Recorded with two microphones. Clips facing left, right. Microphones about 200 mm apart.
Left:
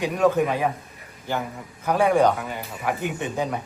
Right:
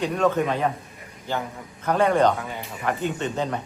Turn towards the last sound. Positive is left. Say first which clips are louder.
# even
turn(degrees=10)  # may be behind; listen again after turning